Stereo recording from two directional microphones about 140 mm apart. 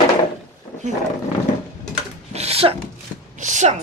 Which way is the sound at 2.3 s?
50° right (ahead or behind).